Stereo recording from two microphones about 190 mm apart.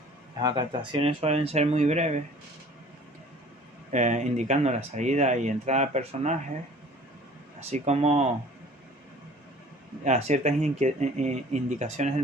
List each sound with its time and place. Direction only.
0.3 s speech: 25° right (ahead or behind)
3.9 s speech: 40° right (ahead or behind)
7.7 s speech: 35° right (ahead or behind)
10.0 s speech: 35° right (ahead or behind)